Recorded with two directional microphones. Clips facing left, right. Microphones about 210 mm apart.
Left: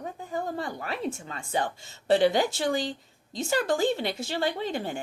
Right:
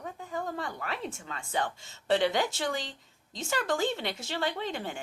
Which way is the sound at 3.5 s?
35° left (ahead or behind).